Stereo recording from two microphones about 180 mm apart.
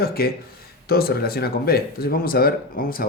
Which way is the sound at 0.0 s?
60° left (ahead or behind).